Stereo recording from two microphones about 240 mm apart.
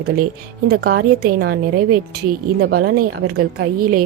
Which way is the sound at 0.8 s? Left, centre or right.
Right.